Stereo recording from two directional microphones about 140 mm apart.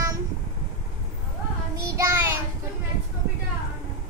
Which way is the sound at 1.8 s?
20° right (ahead or behind).